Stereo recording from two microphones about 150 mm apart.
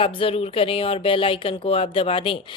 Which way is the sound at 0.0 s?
40° left (ahead or behind).